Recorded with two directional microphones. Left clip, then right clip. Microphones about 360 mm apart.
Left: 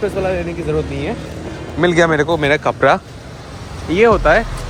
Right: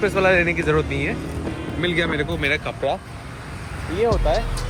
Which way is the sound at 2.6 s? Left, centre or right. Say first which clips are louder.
Left 11 dB; left.